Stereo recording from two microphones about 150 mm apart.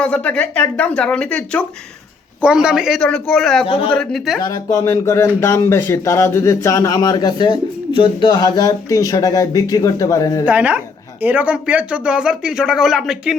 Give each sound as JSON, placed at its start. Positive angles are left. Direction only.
{"t": 0.0, "sound": "speech", "side_deg": 5}
{"t": 2.4, "sound": "speech", "side_deg": -5}
{"t": 3.7, "sound": "speech", "side_deg": 40}
{"t": 3.9, "sound": "speech", "side_deg": 0}
{"t": 4.4, "sound": "speech", "side_deg": 25}
{"t": 10.4, "sound": "speech", "side_deg": -10}